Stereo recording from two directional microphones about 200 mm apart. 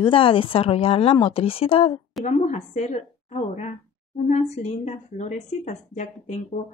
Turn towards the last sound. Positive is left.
turn(degrees=35)  # may be behind; listen again after turning